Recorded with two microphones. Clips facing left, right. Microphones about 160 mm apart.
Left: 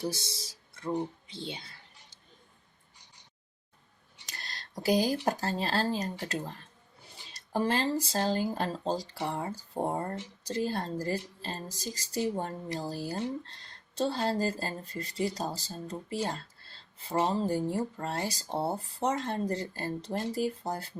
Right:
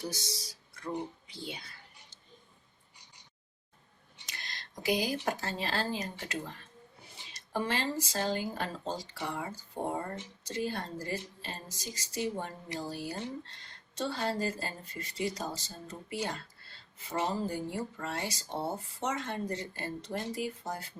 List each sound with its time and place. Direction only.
0.0 s speech: 30° left (ahead or behind)
4.4 s a sound: 35° left (ahead or behind)
5.2 s speech: 35° left (ahead or behind)